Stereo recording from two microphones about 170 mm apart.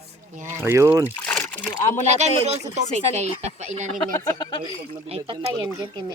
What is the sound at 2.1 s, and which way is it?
Speech, 40° right (ahead or behind).